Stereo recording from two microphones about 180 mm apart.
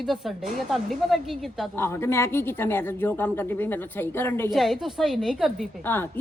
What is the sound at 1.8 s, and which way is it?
A woman's voice, 15° left (ahead or behind).